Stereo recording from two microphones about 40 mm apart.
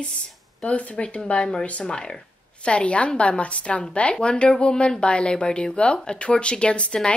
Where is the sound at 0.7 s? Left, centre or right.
Left.